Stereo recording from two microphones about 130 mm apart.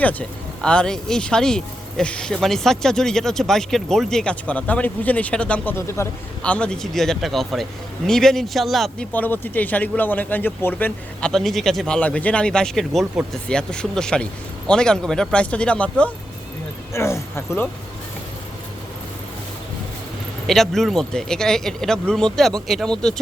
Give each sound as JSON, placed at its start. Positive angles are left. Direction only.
{"t": 0.0, "sound": "speech", "side_deg": 10}
{"t": 5.7, "sound": "speech", "side_deg": 20}
{"t": 6.4, "sound": "speech", "side_deg": 10}
{"t": 9.1, "sound": "speech", "side_deg": 15}
{"t": 11.3, "sound": "speech", "side_deg": 0}
{"t": 16.9, "sound": "speech", "side_deg": 20}
{"t": 20.5, "sound": "speech", "side_deg": 0}